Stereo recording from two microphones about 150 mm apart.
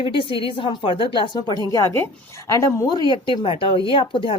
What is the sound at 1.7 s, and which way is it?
A woman's voice, 15° left (ahead or behind).